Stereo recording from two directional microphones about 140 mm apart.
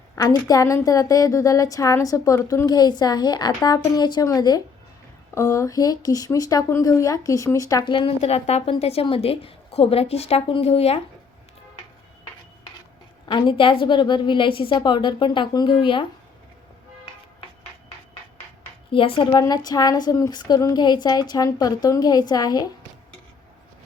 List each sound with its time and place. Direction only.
0.2 s a woman's voice: 25° left (ahead or behind); by 11.0 s 45° left (ahead or behind)
13.2 s a woman's voice: 35° left (ahead or behind)
18.9 s a woman's voice: 40° left (ahead or behind)